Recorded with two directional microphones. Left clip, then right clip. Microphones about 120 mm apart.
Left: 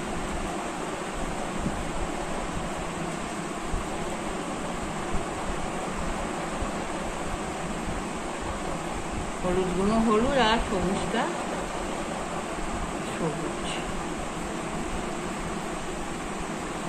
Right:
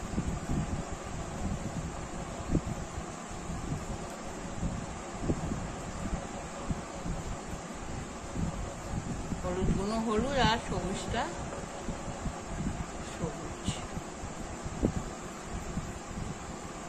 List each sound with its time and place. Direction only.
9.8 s speech: 25° right (ahead or behind)